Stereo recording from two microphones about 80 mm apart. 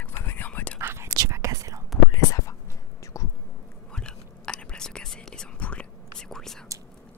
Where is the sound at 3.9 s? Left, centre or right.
Centre.